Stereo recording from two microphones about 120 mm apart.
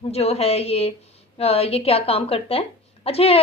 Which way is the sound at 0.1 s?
60° left (ahead or behind).